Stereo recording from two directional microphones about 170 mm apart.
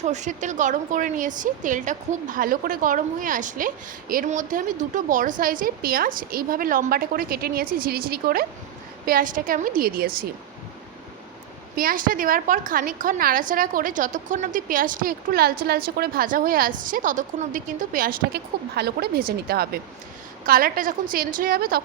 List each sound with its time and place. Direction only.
0.0 s a woman's voice: 45° right (ahead or behind); by 10.2 s 60° right (ahead or behind)
11.8 s a woman's voice: 55° right (ahead or behind)